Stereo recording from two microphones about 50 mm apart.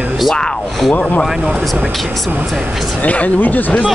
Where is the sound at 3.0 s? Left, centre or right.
Left.